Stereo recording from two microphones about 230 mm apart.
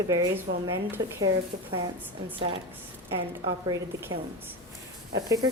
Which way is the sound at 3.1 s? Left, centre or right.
Centre.